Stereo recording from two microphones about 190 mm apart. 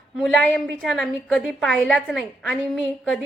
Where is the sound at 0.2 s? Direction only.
Centre (ahead or behind).